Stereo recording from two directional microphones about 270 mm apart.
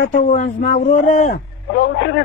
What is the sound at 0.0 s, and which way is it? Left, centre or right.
Speech, left.